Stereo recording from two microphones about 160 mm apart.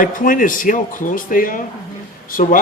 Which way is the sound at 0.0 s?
55° left (ahead or behind).